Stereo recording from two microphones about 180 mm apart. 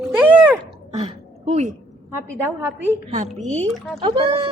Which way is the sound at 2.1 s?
10° right (ahead or behind).